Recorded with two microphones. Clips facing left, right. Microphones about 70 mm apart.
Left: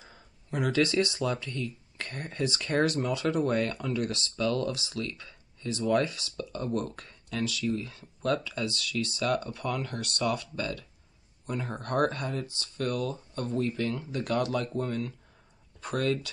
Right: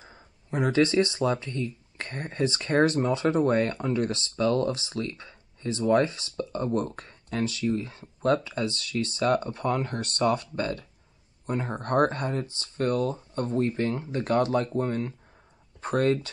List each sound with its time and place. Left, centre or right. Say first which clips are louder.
0.0 s speech: right 3 dB; right